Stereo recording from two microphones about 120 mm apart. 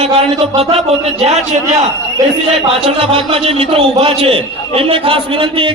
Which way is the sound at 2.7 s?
50° right (ahead or behind).